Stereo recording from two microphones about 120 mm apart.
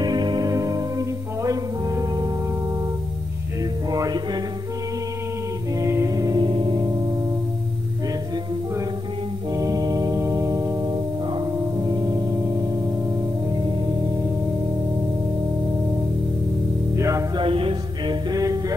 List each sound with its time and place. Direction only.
0.0 s music: 35° right (ahead or behind)
3.9 s music: 35° right (ahead or behind)
5.8 s music: 25° right (ahead or behind); by 6.9 s 40° right (ahead or behind)
9.5 s organ: 30° right (ahead or behind)
11.3 s music: 30° right (ahead or behind)
16.9 s music: 25° right (ahead or behind)
17.4 s music: 45° right (ahead or behind)
18.3 s music: 30° right (ahead or behind)